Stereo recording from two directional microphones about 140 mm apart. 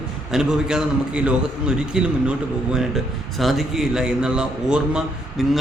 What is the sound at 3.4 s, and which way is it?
A man's voice, centre (ahead or behind).